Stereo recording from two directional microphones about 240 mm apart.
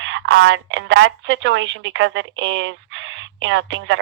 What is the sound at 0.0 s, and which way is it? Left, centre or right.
Speech, right.